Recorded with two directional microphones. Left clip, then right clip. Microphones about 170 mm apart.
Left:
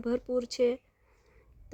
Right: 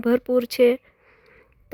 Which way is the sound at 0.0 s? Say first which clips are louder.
Right 10 dB; 35° right (ahead or behind).